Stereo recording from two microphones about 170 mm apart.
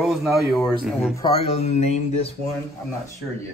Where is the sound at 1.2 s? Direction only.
35° left (ahead or behind).